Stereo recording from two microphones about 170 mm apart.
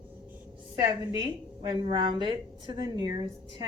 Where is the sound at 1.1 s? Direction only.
25° right (ahead or behind).